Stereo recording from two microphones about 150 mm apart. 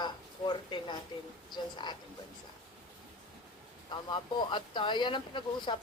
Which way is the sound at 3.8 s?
30° left (ahead or behind).